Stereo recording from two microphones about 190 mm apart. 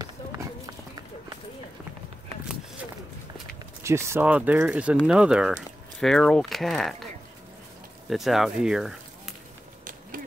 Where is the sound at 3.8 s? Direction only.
15° right (ahead or behind).